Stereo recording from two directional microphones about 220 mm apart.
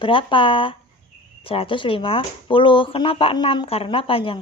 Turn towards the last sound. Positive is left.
turn(degrees=25)  # may be behind; listen again after turning